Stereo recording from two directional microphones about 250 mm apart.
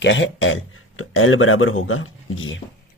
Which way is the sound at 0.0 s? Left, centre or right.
Left.